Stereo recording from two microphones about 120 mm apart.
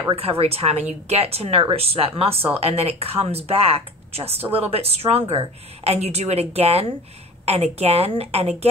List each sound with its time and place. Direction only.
0.1 s speech: 55° right (ahead or behind)